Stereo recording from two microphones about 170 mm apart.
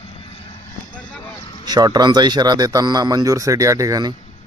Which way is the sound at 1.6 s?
25° right (ahead or behind).